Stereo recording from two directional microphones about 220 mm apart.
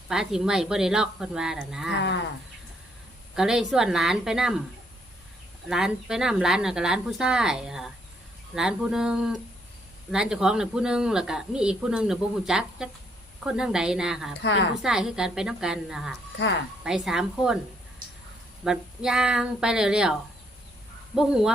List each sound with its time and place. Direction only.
0.1 s speech: centre (ahead or behind)
3.3 s speech: centre (ahead or behind)
5.6 s speech: centre (ahead or behind)
14.4 s a woman's voice: 55° left (ahead or behind)
14.8 s speech: centre (ahead or behind)
18.6 s speech: centre (ahead or behind)
21.2 s speech: centre (ahead or behind)